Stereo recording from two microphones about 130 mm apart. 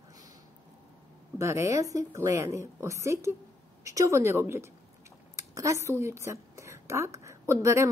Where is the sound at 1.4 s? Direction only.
25° right (ahead or behind).